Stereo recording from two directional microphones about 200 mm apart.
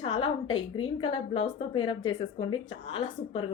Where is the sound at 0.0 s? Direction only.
25° left (ahead or behind).